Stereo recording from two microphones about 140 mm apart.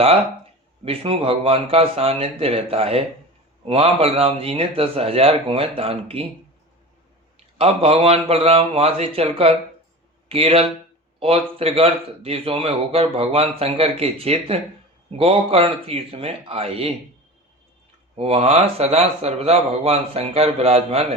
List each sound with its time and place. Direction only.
0.9 s speech: 40° right (ahead or behind)
7.3 s speech: 45° right (ahead or behind)
18.2 s speech: 45° right (ahead or behind)